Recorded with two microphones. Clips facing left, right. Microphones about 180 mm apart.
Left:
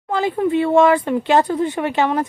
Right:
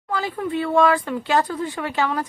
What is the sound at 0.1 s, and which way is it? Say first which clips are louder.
Speech: left 7 dB; 25° left (ahead or behind).